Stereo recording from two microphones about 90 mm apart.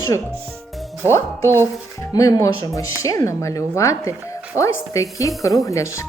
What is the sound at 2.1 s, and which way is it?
Speech, 40° left (ahead or behind).